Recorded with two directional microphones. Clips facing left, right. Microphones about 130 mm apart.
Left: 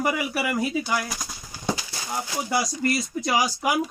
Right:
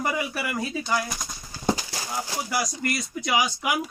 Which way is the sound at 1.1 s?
Centre (ahead or behind).